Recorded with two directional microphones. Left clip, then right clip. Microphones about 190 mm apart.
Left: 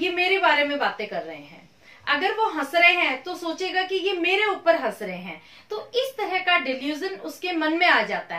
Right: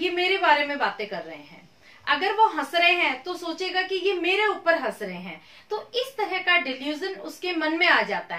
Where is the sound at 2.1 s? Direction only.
15° right (ahead or behind).